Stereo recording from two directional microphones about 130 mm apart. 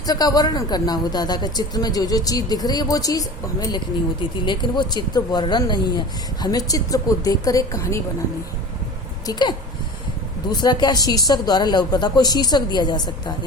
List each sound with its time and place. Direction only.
0.0 s speech: 30° left (ahead or behind)
9.2 s speech: 35° left (ahead or behind)